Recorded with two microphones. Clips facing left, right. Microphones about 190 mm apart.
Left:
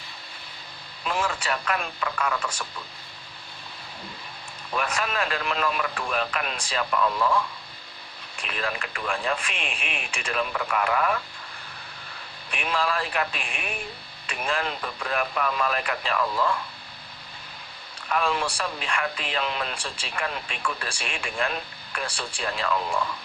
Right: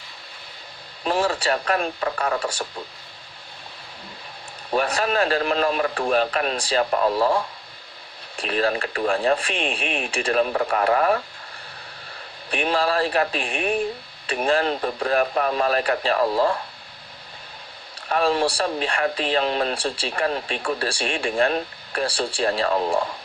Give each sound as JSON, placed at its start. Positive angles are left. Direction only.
{"t": 1.0, "sound": "speech", "side_deg": -35}
{"t": 4.7, "sound": "speech", "side_deg": -35}
{"t": 12.5, "sound": "speech", "side_deg": -35}
{"t": 18.1, "sound": "speech", "side_deg": -35}